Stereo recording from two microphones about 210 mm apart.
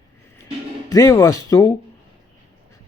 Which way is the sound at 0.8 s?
15° left (ahead or behind).